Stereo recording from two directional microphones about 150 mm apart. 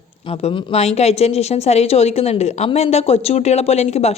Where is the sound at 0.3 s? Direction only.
40° left (ahead or behind).